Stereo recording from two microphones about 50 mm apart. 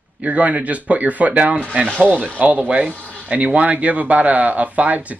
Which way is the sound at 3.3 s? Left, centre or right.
Right.